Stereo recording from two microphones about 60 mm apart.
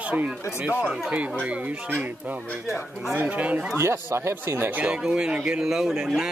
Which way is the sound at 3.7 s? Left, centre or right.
Right.